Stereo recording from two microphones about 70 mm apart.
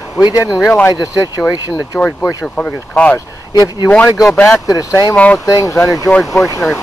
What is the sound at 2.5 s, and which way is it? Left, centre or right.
Speech, centre.